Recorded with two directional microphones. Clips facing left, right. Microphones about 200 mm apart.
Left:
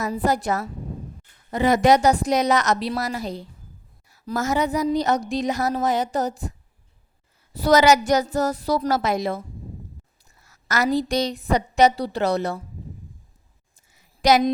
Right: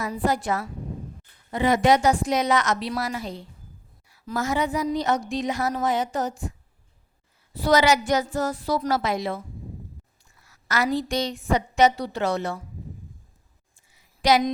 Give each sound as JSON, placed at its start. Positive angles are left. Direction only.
{"t": 0.0, "sound": "speech", "side_deg": 40}
{"t": 7.5, "sound": "speech", "side_deg": 40}
{"t": 10.4, "sound": "speech", "side_deg": 45}
{"t": 13.9, "sound": "a sound", "side_deg": 45}